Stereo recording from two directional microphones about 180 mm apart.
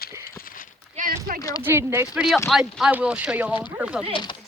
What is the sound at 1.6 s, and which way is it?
Speech, 15° right (ahead or behind).